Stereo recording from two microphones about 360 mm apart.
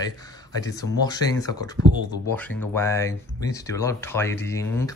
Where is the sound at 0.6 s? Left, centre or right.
Centre.